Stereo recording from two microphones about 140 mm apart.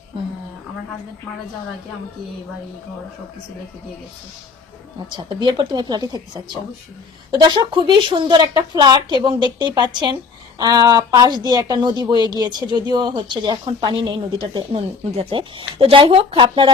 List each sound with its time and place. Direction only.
5.1 s speech: 35° right (ahead or behind)
14.7 s speech: 45° right (ahead or behind)